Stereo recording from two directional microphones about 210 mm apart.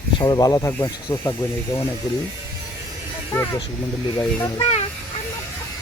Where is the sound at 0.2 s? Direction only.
20° left (ahead or behind).